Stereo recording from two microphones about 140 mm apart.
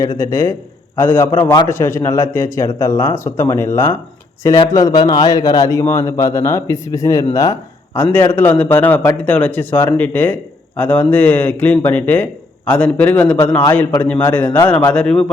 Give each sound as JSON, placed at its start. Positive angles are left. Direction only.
{"t": 0.2, "sound": "a man's voice", "side_deg": 20}